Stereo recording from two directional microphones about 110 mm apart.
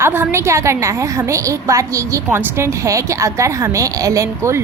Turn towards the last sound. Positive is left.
turn(degrees=-25)  # may be behind; listen again after turning